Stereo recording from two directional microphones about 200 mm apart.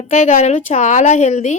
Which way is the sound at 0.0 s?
35° left (ahead or behind).